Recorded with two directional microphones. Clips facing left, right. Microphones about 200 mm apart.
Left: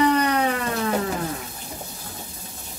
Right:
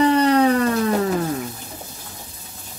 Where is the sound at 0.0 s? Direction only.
30° right (ahead or behind).